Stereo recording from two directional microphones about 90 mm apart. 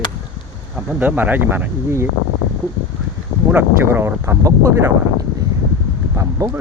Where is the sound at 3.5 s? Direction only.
25° right (ahead or behind).